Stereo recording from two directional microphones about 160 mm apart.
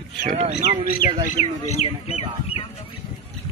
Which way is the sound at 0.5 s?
90° left.